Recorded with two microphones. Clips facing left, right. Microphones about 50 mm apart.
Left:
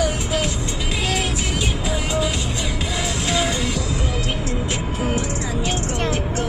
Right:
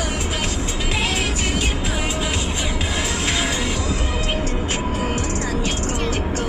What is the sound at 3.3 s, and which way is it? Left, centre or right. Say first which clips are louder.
Music: left 3 dB; right.